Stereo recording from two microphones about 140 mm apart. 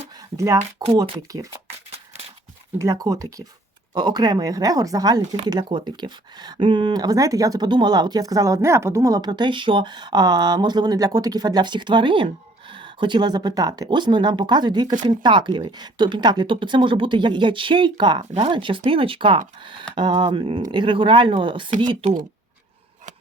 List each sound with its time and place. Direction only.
0.2 s speech: 25° right (ahead or behind)
2.7 s speech: 20° right (ahead or behind)